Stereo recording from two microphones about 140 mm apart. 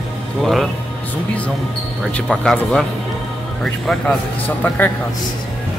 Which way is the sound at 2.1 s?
5° left (ahead or behind).